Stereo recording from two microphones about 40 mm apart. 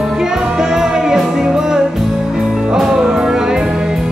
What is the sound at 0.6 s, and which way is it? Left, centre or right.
Music, centre.